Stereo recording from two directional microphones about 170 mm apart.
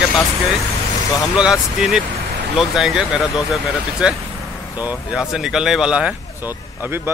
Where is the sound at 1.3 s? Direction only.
5° right (ahead or behind).